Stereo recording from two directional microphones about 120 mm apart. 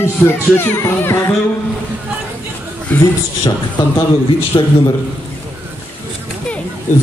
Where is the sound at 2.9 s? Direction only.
15° left (ahead or behind).